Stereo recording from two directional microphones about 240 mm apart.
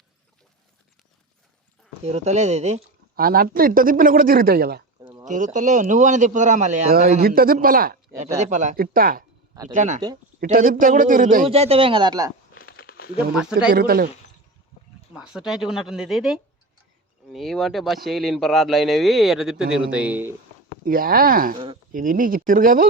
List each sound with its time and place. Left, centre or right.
2.0 s a man's voice: right
12.5 s crumpling: left
13.3 s speech: centre
13.7 s a man's voice: right
15.1 s speech: centre
20.8 s a man's voice: right